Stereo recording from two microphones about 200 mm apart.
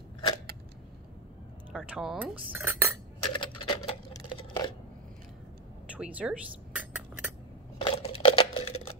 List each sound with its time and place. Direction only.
1.7 s cutlery: 5° right (ahead or behind)
3.3 s typing: 25° left (ahead or behind)
5.9 s cutlery: 5° right (ahead or behind)
7.8 s crumpling: 30° left (ahead or behind)